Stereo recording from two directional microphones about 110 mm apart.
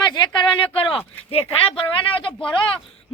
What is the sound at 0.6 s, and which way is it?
Speech, 55° left (ahead or behind).